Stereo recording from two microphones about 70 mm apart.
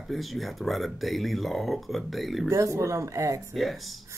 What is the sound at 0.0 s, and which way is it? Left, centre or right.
Speech, centre.